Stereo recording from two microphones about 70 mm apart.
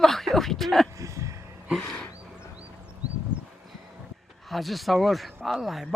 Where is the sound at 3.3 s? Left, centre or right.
Centre.